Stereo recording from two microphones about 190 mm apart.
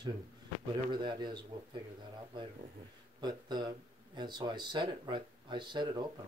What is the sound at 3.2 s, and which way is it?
Speech, 20° right (ahead or behind).